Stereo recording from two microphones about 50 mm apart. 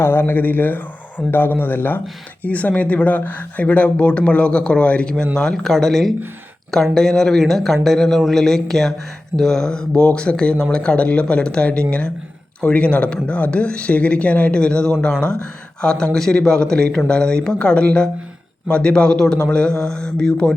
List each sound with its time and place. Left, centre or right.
0.0 s a man's voice: left
2.4 s speech: left
5.1 s speech: centre